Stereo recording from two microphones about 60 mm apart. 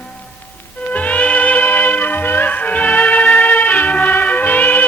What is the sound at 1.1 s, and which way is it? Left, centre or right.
Music, left.